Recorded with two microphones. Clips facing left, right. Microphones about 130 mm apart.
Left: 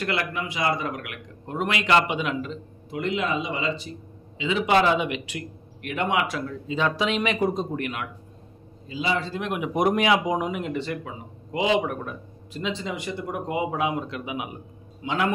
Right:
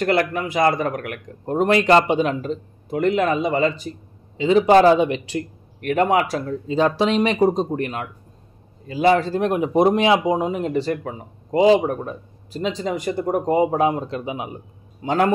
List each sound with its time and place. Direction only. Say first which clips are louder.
0.0 s speech: right 8 dB; 45° right (ahead or behind)
8.8 s speech: right 10 dB; 55° right (ahead or behind); by 15.3 s 40° right (ahead or behind)